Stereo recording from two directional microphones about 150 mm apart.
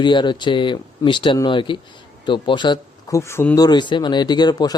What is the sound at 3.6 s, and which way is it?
Speech, 30° left (ahead or behind).